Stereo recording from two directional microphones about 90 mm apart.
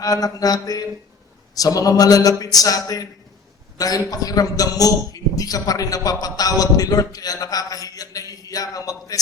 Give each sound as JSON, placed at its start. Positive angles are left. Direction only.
{"t": 0.0, "sound": "a man's voice", "side_deg": 45}